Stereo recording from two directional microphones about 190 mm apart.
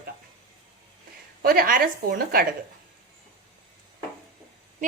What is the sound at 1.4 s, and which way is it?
A woman's voice, 50° right (ahead or behind).